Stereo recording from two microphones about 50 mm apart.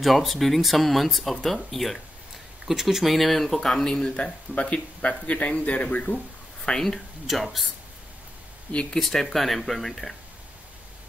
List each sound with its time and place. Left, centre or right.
0.0 s speech: centre; by 6.1 s left
6.6 s speech: centre
7.2 s speech: centre
8.9 s speech: centre